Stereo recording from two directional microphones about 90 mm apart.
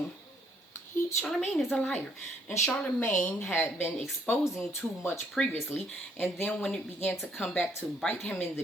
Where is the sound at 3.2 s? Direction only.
10° left (ahead or behind).